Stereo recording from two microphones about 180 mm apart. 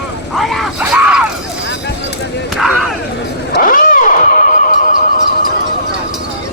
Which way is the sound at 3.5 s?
50° left (ahead or behind).